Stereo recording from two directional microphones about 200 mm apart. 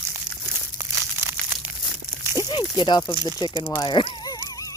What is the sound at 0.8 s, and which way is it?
Crumpling, 15° right (ahead or behind).